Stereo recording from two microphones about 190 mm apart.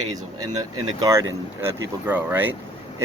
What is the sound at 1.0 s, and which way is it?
Speech, 15° right (ahead or behind).